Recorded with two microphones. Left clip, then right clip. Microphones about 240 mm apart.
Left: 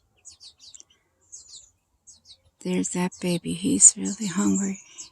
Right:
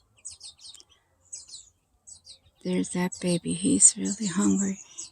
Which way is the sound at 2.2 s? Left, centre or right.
Centre.